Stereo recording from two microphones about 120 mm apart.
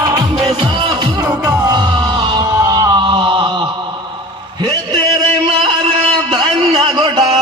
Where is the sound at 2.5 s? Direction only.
30° right (ahead or behind).